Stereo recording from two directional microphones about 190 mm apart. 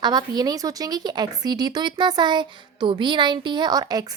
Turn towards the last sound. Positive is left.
turn(degrees=-20)  # may be behind; listen again after turning